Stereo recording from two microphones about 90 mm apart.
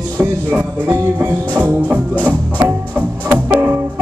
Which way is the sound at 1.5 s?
20° right (ahead or behind).